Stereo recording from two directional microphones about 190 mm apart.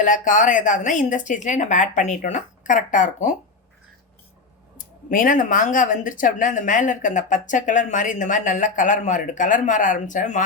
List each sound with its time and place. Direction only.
0.0 s speech: 45° left (ahead or behind)
5.0 s speech: 45° left (ahead or behind)